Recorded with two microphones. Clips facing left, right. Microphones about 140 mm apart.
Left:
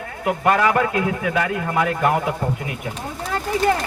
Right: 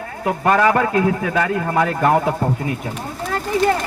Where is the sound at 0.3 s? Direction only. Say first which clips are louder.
Right 2 dB; 35° right (ahead or behind).